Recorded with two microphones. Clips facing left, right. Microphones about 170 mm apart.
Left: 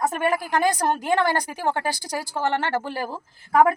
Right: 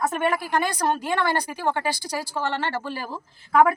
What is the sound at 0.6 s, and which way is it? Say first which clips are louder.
A woman's voice: left 2 dB; 45° left (ahead or behind).